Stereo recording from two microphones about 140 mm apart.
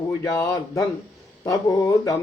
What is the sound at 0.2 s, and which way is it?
Speech, 20° left (ahead or behind).